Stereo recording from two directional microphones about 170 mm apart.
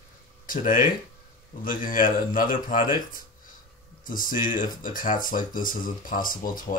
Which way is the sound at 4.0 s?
55° left (ahead or behind).